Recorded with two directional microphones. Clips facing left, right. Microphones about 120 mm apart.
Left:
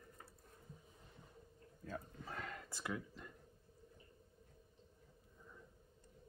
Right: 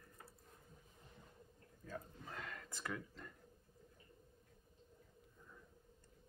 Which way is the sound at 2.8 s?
10° left (ahead or behind).